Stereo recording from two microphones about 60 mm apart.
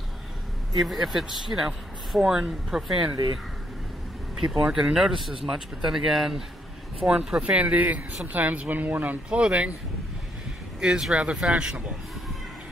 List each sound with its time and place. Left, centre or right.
0.7 s speech: centre
4.4 s speech: centre
10.8 s speech: centre